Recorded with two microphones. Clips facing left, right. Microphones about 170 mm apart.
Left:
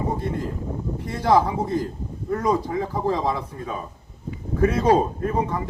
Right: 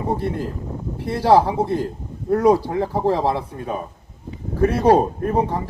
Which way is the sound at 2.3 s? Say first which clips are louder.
Right 7 dB; 70° right (ahead or behind).